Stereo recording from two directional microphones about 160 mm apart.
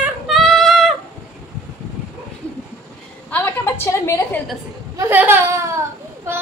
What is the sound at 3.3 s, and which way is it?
A woman's voice, 10° left (ahead or behind).